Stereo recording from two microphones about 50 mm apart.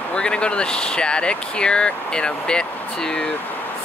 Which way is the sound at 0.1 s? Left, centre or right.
Centre.